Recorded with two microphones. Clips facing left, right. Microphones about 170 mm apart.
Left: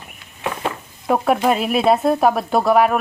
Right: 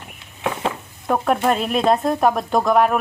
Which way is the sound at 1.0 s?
5° left (ahead or behind).